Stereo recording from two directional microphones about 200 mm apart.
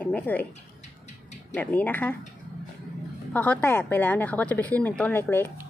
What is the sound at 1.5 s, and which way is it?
Speech, 10° left (ahead or behind).